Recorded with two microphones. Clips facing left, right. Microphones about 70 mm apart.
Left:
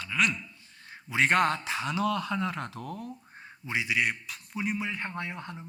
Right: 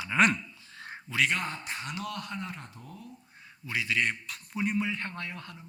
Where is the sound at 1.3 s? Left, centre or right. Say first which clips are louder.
Left 8 dB; left.